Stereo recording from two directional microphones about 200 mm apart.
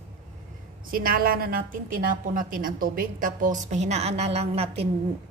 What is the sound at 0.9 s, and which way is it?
A woman's voice, 45° right (ahead or behind).